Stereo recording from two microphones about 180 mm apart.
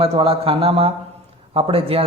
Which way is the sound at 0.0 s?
30° right (ahead or behind).